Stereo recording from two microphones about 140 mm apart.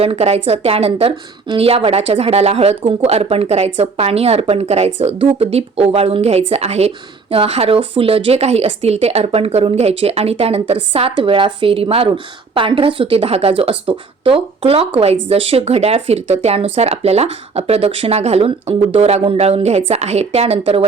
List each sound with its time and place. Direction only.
0.0 s speech: 45° right (ahead or behind)